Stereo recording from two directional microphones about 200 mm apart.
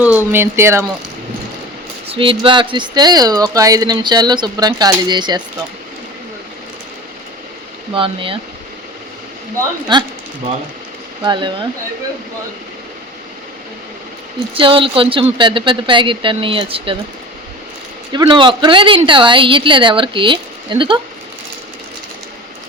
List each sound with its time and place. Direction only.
0.0 s speech: 10° right (ahead or behind)
2.0 s speech: 25° right (ahead or behind)
7.9 s speech: 25° right (ahead or behind)
9.9 s speech: 20° right (ahead or behind)
11.2 s speech: 20° right (ahead or behind)
14.5 s speech: 25° right (ahead or behind)
18.1 s speech: 25° right (ahead or behind)